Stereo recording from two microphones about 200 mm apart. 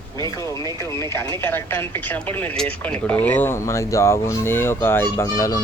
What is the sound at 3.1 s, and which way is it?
Speech, 10° left (ahead or behind).